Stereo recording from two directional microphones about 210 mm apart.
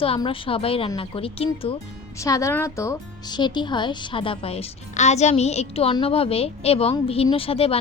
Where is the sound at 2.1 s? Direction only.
15° left (ahead or behind).